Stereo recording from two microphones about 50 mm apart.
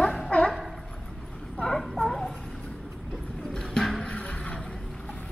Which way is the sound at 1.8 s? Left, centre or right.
Centre.